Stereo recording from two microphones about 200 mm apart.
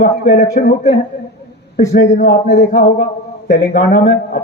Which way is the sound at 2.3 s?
50° left (ahead or behind).